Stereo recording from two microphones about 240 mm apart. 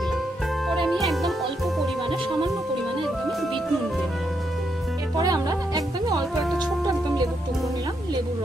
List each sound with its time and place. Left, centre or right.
0.8 s music: centre
2.0 s music: right
3.0 s music: centre
5.1 s music: centre